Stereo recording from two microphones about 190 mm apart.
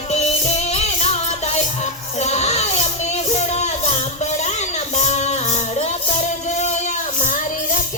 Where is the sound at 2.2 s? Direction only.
35° left (ahead or behind).